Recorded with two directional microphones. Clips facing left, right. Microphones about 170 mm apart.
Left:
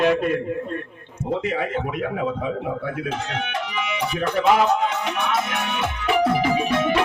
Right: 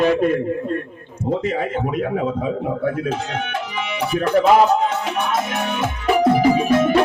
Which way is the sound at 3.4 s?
45° right (ahead or behind).